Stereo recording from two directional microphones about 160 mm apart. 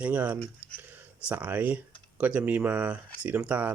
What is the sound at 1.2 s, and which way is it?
Speech, 10° right (ahead or behind).